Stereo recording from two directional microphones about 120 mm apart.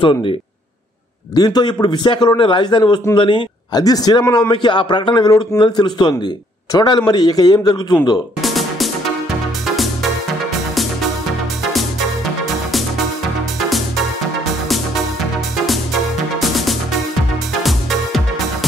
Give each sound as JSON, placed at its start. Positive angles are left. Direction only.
{"t": 0.0, "sound": "speech", "side_deg": 40}
{"t": 1.3, "sound": "speech", "side_deg": 35}
{"t": 8.4, "sound": "music", "side_deg": 0}
{"t": 15.6, "sound": "music", "side_deg": 0}